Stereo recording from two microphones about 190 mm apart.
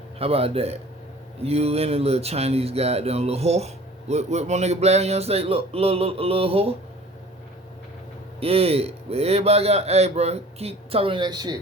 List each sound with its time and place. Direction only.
0.2 s a man's voice: 30° right (ahead or behind)
8.4 s a man's voice: 30° right (ahead or behind)